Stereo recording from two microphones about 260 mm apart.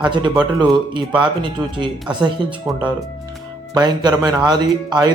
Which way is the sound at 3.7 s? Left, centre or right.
Centre.